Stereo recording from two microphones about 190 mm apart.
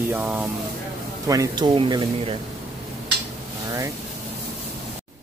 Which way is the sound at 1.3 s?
20° right (ahead or behind).